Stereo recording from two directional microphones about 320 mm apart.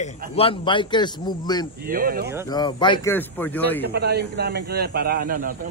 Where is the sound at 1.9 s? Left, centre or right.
Right.